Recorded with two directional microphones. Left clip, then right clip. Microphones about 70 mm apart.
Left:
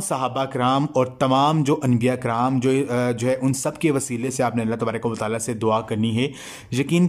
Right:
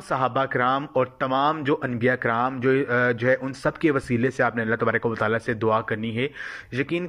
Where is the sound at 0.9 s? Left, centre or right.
Left.